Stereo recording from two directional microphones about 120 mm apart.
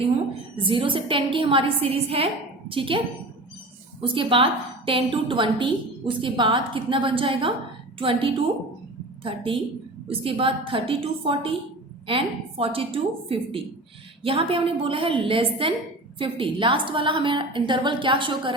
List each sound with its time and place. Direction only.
0.5 s a woman's voice: 45° right (ahead or behind)
4.0 s a woman's voice: 45° right (ahead or behind)